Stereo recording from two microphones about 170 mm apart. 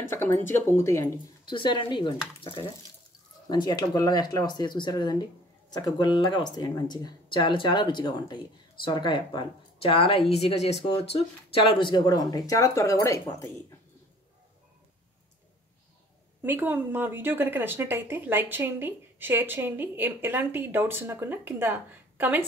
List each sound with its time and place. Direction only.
0.1 s speech: 15° left (ahead or behind)
1.5 s speech: 30° left (ahead or behind)
16.4 s speech: 10° right (ahead or behind)